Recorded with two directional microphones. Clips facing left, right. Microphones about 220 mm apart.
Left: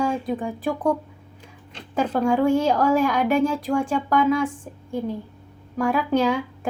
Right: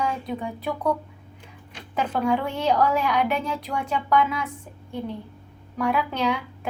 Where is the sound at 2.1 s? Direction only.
45° left (ahead or behind).